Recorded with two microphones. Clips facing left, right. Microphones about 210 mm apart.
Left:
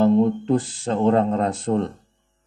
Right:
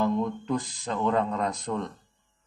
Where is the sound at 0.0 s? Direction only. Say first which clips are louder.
Left 9 dB; 30° left (ahead or behind).